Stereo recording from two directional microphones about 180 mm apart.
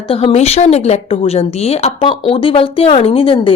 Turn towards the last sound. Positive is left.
turn(degrees=30)  # may be behind; listen again after turning